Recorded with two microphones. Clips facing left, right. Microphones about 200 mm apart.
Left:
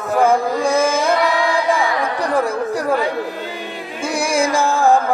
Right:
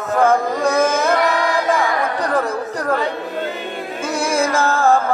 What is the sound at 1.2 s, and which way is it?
Music, 45° right (ahead or behind).